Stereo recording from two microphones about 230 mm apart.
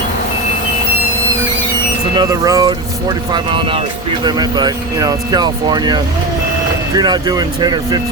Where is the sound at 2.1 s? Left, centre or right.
Centre.